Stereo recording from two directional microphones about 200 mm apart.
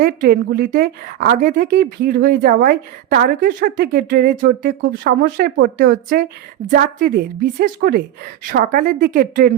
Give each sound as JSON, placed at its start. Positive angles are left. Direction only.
{"t": 0.0, "sound": "a woman's voice", "side_deg": -50}